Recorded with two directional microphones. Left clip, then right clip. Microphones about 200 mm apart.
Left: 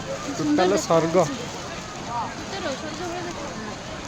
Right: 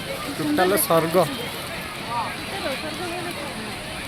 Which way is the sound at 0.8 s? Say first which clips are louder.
Even; 5° left (ahead or behind).